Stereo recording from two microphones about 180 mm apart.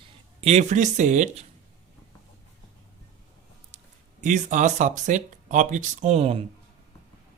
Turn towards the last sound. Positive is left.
turn(degrees=-35)  # may be behind; listen again after turning